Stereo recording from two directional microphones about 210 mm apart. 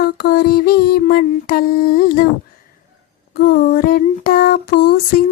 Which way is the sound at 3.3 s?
45° left (ahead or behind).